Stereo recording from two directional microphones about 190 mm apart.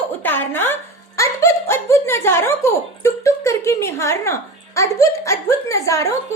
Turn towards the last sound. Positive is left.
turn(degrees=15)  # may be behind; listen again after turning